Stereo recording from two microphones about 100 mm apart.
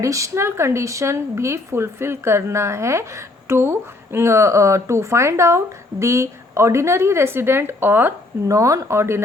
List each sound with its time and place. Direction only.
0.0 s speech: 30° right (ahead or behind)
8.4 s speech: 30° right (ahead or behind)